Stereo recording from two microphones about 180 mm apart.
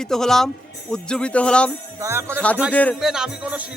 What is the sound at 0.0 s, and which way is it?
Speech, 5° left (ahead or behind).